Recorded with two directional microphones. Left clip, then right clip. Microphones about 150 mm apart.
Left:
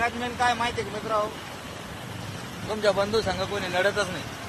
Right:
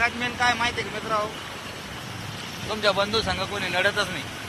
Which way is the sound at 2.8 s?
30° left (ahead or behind).